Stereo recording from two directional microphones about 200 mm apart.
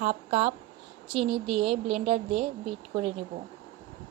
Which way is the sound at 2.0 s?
30° right (ahead or behind).